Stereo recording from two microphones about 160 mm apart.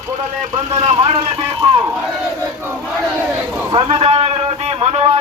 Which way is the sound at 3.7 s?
35° right (ahead or behind).